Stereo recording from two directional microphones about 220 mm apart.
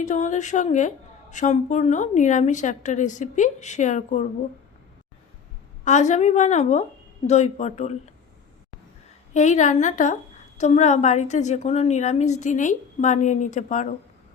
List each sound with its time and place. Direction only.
0.0 s a woman's voice: 35° left (ahead or behind)
5.8 s a woman's voice: 35° left (ahead or behind)
9.3 s a woman's voice: 35° left (ahead or behind)